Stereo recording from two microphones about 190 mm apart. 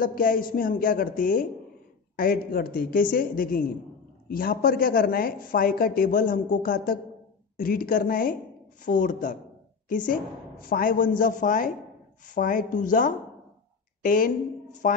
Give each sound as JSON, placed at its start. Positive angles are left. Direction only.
{"t": 0.0, "sound": "a woman's voice", "side_deg": 45}